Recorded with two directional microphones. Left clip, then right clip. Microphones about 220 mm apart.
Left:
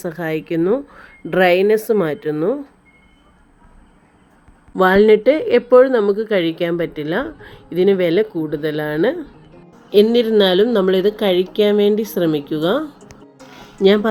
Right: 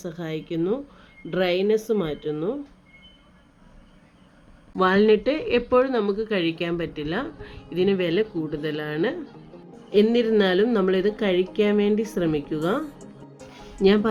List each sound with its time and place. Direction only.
0.0 s speech: 25° left (ahead or behind)
4.7 s a woman's voice: 15° left (ahead or behind)
13.8 s a woman's voice: 15° left (ahead or behind)